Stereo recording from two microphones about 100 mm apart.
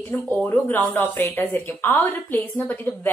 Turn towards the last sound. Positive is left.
turn(degrees=15)  # may be behind; listen again after turning